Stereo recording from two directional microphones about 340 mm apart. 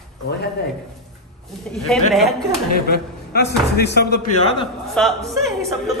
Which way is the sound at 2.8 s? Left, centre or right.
Left.